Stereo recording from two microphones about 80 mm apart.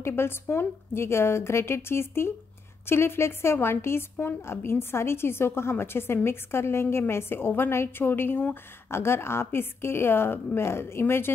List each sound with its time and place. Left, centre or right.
0.0 s a woman's voice: left